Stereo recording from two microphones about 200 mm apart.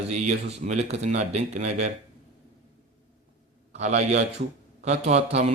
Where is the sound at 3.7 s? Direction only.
35° right (ahead or behind).